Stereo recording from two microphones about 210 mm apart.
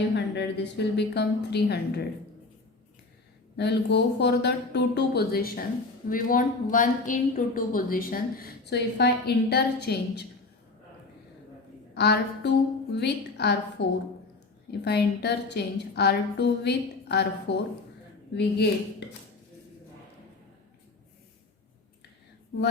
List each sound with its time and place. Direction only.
0.3 s a woman's voice: 55° left (ahead or behind)
3.6 s a woman's voice: 55° left (ahead or behind)
11.9 s a woman's voice: 55° left (ahead or behind)